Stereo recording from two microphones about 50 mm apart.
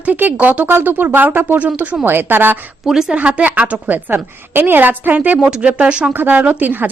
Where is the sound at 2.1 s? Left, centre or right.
Right.